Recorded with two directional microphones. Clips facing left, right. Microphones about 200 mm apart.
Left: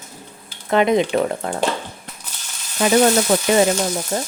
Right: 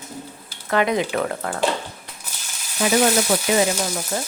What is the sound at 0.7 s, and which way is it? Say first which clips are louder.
Speech: left 4 dB; 20° left (ahead or behind).